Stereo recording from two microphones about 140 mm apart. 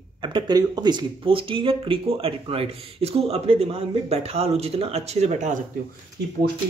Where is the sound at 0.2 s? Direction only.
35° right (ahead or behind); by 5.6 s 55° right (ahead or behind).